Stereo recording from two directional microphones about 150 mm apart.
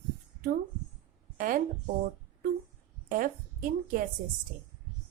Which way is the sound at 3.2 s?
65° right (ahead or behind).